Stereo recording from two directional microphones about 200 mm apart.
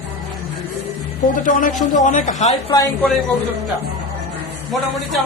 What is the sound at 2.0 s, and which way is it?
Speech, 35° left (ahead or behind).